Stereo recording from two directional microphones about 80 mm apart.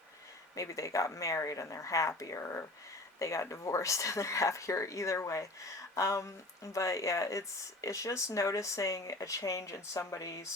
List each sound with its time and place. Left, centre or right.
0.5 s speech: left